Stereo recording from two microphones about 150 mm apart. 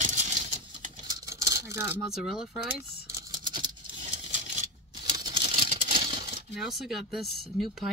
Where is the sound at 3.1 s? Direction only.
30° right (ahead or behind).